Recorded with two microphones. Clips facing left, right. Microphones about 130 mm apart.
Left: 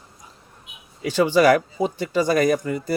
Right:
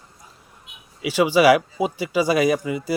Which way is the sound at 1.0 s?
5° right (ahead or behind).